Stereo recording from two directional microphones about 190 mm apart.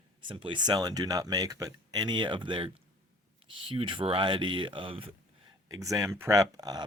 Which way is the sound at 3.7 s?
25° right (ahead or behind).